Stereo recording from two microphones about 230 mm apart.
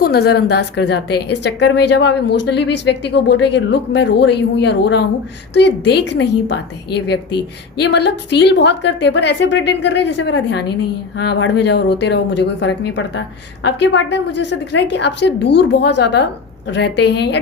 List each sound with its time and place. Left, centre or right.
0.0 s speech: left